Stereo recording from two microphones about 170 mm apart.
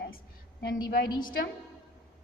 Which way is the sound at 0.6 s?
70° left (ahead or behind).